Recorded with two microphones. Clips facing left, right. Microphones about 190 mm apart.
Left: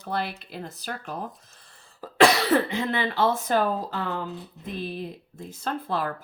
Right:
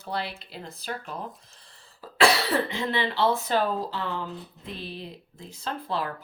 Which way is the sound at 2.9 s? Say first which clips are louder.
Even; 45° left (ahead or behind).